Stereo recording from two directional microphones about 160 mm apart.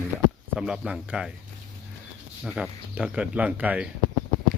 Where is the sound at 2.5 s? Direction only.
5° right (ahead or behind).